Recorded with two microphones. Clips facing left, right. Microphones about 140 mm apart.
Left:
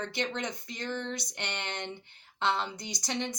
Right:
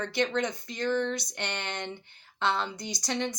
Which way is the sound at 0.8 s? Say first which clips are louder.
Right 8 dB; 70° right (ahead or behind).